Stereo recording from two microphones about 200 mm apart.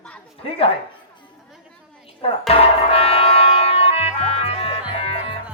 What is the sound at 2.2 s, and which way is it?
Music, 30° left (ahead or behind).